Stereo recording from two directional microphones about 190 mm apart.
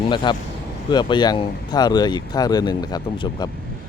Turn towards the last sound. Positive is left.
turn(degrees=20)  # may be behind; listen again after turning